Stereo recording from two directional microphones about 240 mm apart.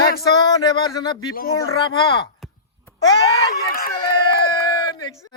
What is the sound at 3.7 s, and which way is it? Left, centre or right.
Speech, left.